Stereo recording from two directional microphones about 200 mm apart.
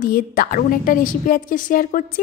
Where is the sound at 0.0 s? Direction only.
45° left (ahead or behind).